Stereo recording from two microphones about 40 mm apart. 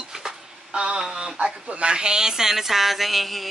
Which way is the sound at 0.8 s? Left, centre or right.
Centre.